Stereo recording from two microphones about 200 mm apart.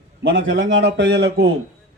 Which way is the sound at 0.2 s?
60° right (ahead or behind).